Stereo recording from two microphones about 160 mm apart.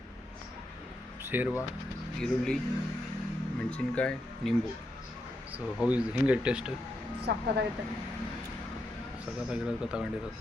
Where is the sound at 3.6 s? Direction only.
5° left (ahead or behind).